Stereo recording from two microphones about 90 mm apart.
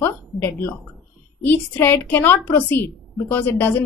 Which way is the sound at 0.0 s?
25° left (ahead or behind).